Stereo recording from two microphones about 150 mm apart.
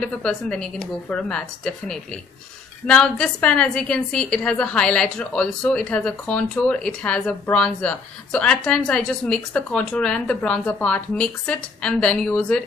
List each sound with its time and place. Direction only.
0.0 s a woman's voice: 5° left (ahead or behind)